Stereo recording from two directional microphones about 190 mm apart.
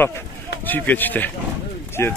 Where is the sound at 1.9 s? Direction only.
15° left (ahead or behind).